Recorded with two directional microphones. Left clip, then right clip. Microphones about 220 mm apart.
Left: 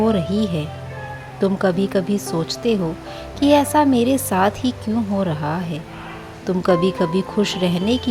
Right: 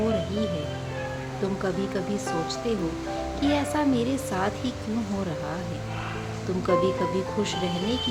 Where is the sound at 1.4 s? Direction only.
35° left (ahead or behind).